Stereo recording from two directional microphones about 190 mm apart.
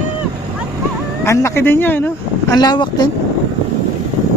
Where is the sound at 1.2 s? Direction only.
15° left (ahead or behind).